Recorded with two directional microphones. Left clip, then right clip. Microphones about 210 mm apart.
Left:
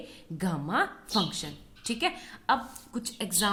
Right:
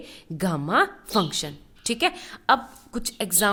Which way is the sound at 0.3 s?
50° right (ahead or behind).